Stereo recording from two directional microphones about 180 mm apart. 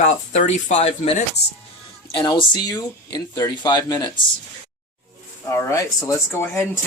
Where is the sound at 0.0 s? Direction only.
40° left (ahead or behind).